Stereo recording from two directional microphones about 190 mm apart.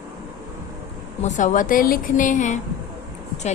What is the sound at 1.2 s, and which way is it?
A woman's voice, 40° left (ahead or behind).